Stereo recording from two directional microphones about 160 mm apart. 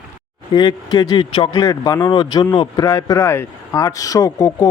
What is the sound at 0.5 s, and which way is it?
Speech, 25° left (ahead or behind).